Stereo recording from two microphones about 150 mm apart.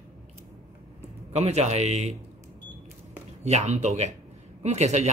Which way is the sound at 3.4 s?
50° right (ahead or behind).